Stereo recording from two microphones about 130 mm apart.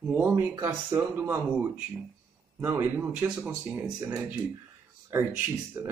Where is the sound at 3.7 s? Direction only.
20° right (ahead or behind).